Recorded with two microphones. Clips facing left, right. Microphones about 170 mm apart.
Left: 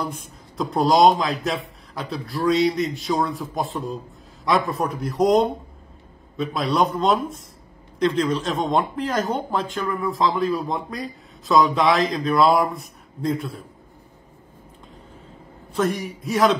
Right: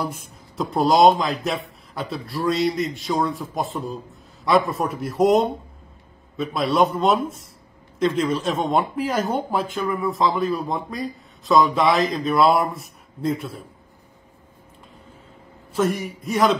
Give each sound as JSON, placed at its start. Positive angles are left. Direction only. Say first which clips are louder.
{"t": 0.0, "sound": "speech", "louder": "right 1 dB", "side_deg": -5}
{"t": 15.7, "sound": "speech", "louder": "right 1 dB", "side_deg": 0}